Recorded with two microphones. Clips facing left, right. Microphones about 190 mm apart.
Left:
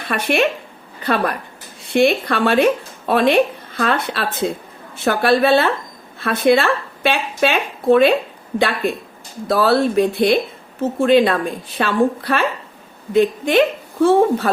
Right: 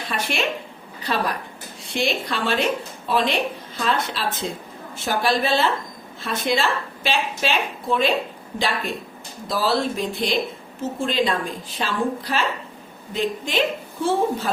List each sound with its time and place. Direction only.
0.1 s speech: 60° left (ahead or behind)
9.5 s speech: 60° left (ahead or behind)